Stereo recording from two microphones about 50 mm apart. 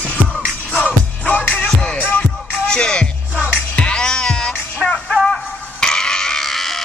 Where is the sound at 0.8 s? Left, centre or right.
Left.